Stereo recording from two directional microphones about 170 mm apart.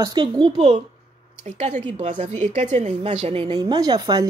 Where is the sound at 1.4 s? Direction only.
45° right (ahead or behind).